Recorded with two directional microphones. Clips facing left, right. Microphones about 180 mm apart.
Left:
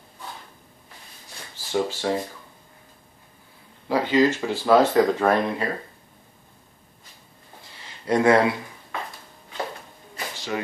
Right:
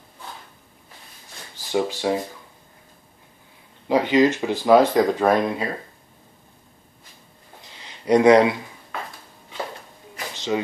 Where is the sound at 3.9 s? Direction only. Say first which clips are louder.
Right 2 dB; 20° right (ahead or behind).